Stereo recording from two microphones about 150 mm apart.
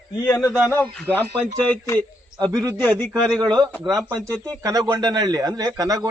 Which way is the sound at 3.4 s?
25° right (ahead or behind).